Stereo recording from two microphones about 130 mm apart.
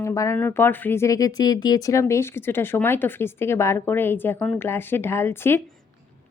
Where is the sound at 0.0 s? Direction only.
20° left (ahead or behind).